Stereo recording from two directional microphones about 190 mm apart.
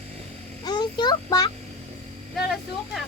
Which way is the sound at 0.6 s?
20° left (ahead or behind).